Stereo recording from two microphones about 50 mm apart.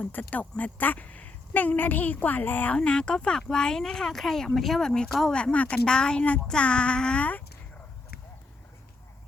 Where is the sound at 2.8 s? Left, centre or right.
Centre.